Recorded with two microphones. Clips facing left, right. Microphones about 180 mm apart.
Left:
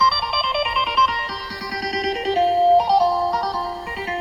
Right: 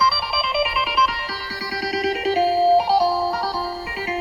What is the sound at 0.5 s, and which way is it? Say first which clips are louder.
Music: right 1 dB; 5° right (ahead or behind).